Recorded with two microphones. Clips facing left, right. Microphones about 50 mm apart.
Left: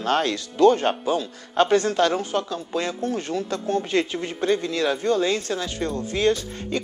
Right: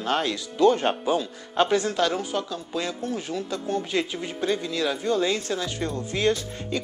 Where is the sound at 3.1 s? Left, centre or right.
Centre.